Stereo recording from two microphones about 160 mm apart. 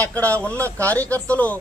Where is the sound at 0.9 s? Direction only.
10° left (ahead or behind).